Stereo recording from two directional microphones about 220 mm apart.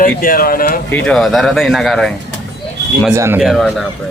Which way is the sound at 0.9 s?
5° left (ahead or behind).